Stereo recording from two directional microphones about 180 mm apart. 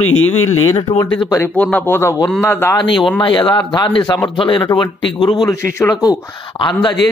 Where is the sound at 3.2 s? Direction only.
25° left (ahead or behind).